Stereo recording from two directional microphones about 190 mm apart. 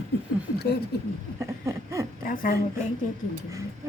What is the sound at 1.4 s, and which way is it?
Speech, 15° right (ahead or behind).